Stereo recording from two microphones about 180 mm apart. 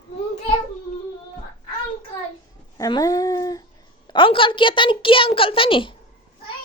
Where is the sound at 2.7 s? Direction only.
20° left (ahead or behind).